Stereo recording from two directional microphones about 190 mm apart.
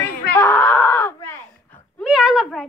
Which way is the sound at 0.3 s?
15° left (ahead or behind).